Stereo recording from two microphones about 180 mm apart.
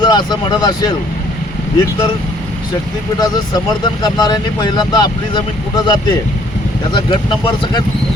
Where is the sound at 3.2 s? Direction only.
20° left (ahead or behind).